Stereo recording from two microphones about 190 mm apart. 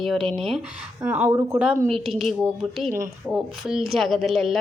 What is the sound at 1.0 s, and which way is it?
A woman's voice, 10° right (ahead or behind).